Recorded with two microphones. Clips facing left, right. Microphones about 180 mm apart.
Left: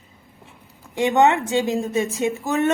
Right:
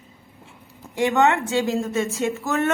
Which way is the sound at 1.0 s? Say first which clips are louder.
Left 2 dB; 20° left (ahead or behind).